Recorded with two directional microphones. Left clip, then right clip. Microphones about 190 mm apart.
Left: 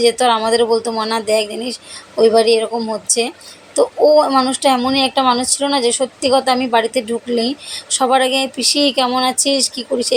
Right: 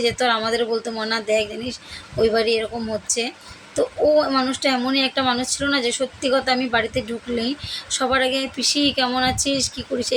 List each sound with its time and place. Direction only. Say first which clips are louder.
0.0 s speech: left 6 dB; centre (ahead or behind)